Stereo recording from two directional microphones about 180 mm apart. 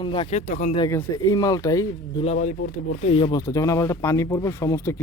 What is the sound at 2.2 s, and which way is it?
Speech, 45° left (ahead or behind).